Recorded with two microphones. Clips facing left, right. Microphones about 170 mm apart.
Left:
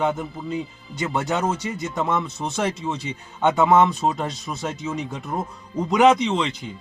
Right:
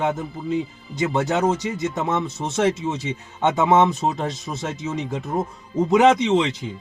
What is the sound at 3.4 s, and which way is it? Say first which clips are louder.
Speech: even; 20° right (ahead or behind).